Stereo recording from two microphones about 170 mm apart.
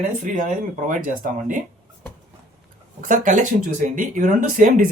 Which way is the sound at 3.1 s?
50° right (ahead or behind).